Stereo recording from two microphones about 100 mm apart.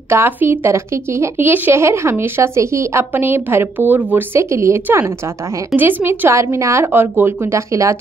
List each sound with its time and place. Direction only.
0.1 s speech: 25° right (ahead or behind)